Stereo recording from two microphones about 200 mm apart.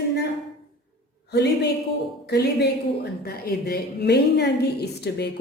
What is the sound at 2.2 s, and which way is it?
A woman's voice, 55° left (ahead or behind).